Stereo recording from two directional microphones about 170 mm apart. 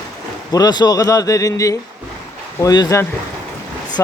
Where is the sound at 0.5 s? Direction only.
25° left (ahead or behind).